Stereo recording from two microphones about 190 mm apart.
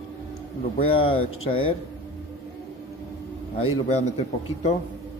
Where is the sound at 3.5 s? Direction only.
30° left (ahead or behind).